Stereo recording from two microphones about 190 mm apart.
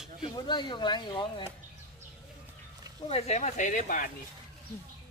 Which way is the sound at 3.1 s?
35° left (ahead or behind).